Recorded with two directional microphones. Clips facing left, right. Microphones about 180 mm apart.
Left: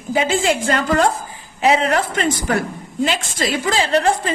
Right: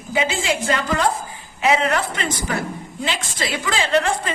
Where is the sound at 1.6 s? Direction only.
35° left (ahead or behind).